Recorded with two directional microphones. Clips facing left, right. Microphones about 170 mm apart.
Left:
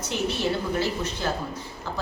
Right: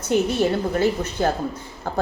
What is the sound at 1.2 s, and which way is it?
Speech, 50° right (ahead or behind).